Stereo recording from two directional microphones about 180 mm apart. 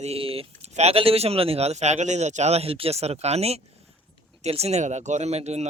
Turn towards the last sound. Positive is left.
turn(degrees=-40)  # may be behind; listen again after turning